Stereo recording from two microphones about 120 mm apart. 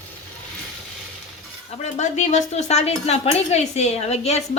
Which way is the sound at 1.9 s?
75° left (ahead or behind).